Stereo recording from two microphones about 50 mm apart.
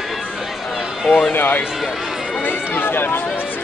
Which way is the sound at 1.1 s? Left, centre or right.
Centre.